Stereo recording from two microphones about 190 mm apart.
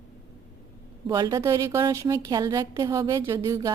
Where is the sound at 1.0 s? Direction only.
20° right (ahead or behind).